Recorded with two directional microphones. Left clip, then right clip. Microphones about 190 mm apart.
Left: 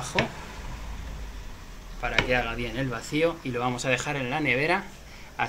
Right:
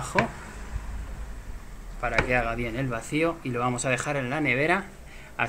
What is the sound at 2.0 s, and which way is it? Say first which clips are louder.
Speech: even; 45° right (ahead or behind).